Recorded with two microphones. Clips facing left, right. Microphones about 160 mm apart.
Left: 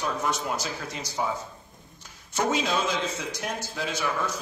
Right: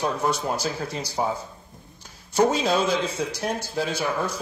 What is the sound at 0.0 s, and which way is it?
A man's voice, 35° right (ahead or behind).